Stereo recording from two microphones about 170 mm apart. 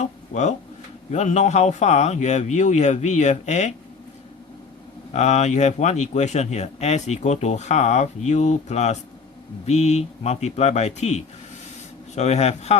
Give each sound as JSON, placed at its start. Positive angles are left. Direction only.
{"t": 0.0, "sound": "a sound", "side_deg": 40}
{"t": 1.1, "sound": "a man's voice", "side_deg": 40}
{"t": 5.1, "sound": "speech", "side_deg": 40}